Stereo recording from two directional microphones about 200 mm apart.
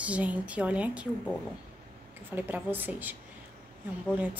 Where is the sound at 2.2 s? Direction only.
10° right (ahead or behind).